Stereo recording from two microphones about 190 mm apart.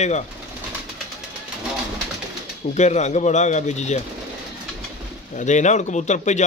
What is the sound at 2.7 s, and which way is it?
A man's voice, 35° left (ahead or behind).